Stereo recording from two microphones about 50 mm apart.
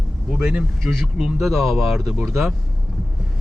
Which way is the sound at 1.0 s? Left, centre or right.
Centre.